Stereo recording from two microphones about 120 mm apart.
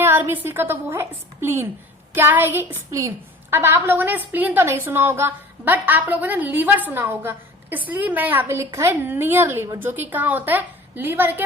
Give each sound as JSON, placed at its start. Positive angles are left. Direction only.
{"t": 0.0, "sound": "a woman's voice", "side_deg": -15}